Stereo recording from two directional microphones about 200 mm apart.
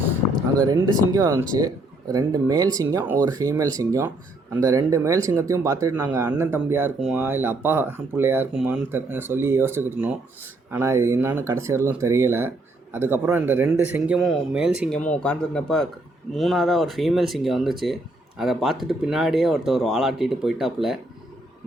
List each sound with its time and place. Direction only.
0.5 s speech: 20° right (ahead or behind); by 21.0 s centre (ahead or behind)